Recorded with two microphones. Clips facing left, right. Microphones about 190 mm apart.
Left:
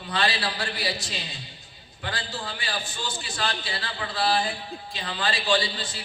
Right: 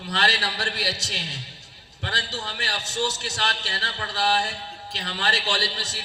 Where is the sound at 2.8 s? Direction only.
80° right.